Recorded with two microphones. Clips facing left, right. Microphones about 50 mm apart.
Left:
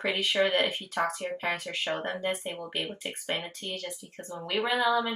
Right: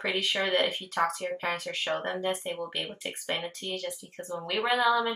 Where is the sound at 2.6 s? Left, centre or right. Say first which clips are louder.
Even; centre.